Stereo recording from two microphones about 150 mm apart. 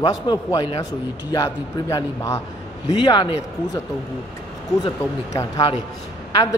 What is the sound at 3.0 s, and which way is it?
Speech, 30° left (ahead or behind).